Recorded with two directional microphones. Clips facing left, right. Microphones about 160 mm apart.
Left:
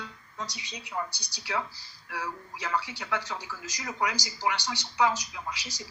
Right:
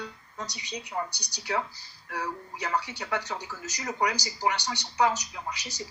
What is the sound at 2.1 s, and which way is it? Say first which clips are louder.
A man's voice: right 2 dB; 40° right (ahead or behind).